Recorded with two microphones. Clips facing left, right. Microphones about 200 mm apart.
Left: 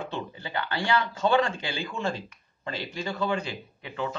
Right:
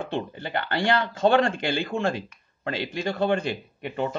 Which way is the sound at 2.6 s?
75° right (ahead or behind).